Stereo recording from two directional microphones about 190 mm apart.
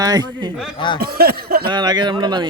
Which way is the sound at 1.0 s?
55° right (ahead or behind).